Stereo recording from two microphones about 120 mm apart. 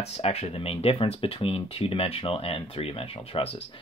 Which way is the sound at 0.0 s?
60° left (ahead or behind).